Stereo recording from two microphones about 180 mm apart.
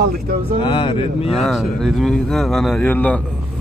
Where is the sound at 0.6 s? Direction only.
25° left (ahead or behind).